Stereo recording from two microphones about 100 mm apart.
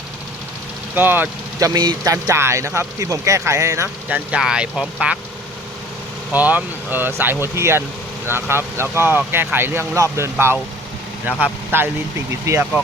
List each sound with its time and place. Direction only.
0.9 s speech: 20° right (ahead or behind)
1.5 s speech: 40° right (ahead or behind)
2.2 s speech: 30° right (ahead or behind)
4.1 s speech: 10° right (ahead or behind)
6.3 s speech: 15° right (ahead or behind)
11.3 s speech: 15° right (ahead or behind)